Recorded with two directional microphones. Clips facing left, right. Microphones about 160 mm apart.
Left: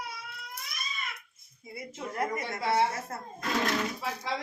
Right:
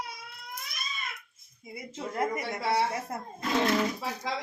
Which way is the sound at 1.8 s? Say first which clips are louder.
Right 2 dB; 20° right (ahead or behind).